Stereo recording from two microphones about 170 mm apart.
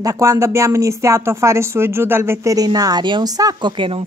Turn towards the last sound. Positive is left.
turn(degrees=-30)  # may be behind; listen again after turning